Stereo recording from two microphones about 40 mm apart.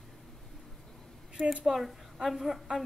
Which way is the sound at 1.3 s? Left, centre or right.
Centre.